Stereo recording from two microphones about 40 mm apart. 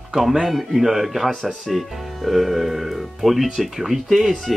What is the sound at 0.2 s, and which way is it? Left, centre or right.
Speech, centre.